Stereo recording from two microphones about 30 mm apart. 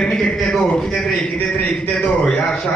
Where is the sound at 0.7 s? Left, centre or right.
Left.